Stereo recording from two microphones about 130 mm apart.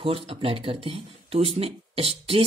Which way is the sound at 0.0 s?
45° right (ahead or behind).